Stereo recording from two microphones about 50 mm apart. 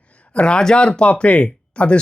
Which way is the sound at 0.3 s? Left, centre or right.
Centre.